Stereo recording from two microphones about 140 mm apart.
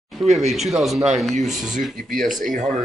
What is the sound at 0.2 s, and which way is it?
Speech, centre (ahead or behind).